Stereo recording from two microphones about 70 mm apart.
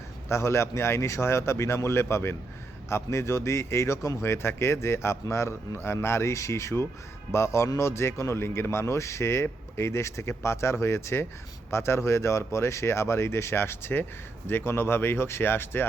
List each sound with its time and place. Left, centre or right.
0.3 s speech: left